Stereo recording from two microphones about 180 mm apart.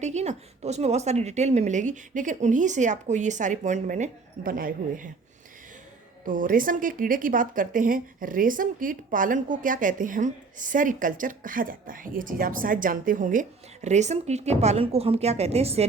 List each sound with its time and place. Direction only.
0.0 s a woman's voice: 40° right (ahead or behind)
6.2 s speech: 50° right (ahead or behind)